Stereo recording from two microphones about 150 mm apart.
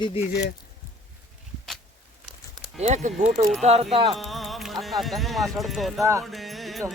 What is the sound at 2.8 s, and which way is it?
Speech, 55° right (ahead or behind).